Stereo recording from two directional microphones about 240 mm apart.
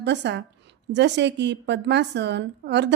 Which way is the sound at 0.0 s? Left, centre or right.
Right.